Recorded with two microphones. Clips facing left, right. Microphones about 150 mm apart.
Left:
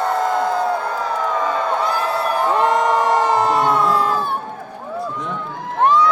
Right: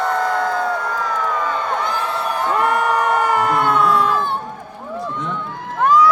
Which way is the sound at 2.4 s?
25° left (ahead or behind).